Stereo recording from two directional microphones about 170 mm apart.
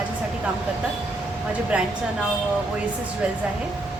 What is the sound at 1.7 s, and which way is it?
Speech, 5° right (ahead or behind).